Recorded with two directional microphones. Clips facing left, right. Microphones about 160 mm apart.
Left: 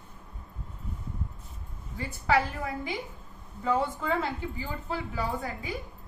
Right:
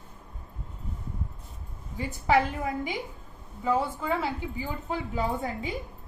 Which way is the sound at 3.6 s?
5° right (ahead or behind).